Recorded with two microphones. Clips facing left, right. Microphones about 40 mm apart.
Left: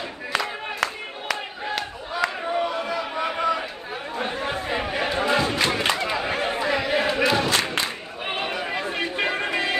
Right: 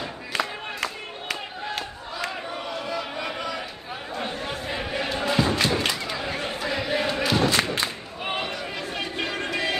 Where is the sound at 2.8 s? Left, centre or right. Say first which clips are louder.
Left 3 dB; left.